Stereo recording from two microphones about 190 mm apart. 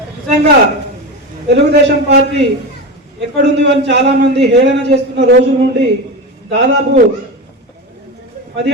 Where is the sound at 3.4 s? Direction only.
65° right (ahead or behind).